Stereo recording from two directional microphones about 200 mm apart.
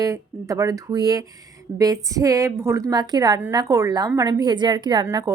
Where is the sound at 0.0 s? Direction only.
15° right (ahead or behind).